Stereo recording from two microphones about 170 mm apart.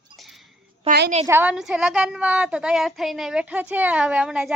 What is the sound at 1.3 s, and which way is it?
Speech, 10° right (ahead or behind).